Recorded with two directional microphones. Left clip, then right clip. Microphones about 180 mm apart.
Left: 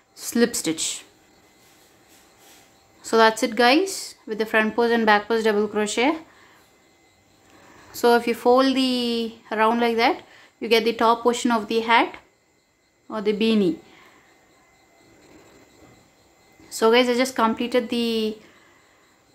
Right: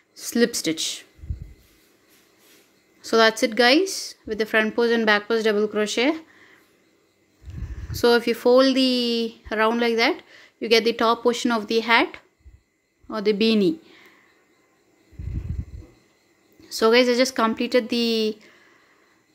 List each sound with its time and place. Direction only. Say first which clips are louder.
0.1 s speech: even; 10° right (ahead or behind)
3.0 s speech: even; 15° right (ahead or behind)
7.9 s speech: even; 15° right (ahead or behind)
16.6 s speech: even; 15° right (ahead or behind)